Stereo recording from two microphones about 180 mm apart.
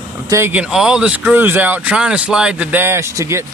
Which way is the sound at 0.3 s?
15° right (ahead or behind).